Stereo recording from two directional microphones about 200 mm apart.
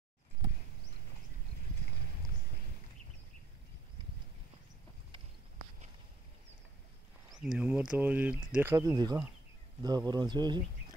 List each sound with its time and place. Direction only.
7.2 s speech: centre (ahead or behind); by 10.6 s 20° right (ahead or behind)